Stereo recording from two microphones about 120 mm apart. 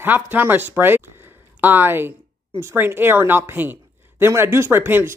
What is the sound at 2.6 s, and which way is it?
Speech, 20° right (ahead or behind).